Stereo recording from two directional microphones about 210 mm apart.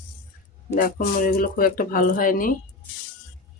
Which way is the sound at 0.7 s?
40° left (ahead or behind).